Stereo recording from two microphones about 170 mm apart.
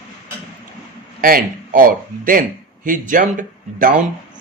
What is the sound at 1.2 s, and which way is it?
A man's voice, 60° right (ahead or behind).